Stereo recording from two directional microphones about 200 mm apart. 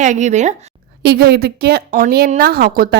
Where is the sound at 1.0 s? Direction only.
55° right (ahead or behind).